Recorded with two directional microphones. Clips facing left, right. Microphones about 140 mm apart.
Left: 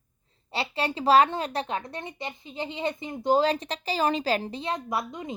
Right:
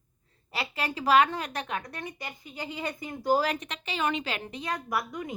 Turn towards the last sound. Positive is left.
turn(degrees=25)  # may be behind; listen again after turning